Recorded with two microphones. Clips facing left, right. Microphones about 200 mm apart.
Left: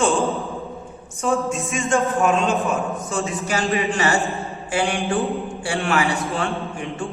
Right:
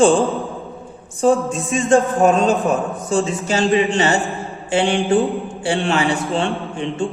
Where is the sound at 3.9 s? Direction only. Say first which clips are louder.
Right 3 dB; 30° right (ahead or behind).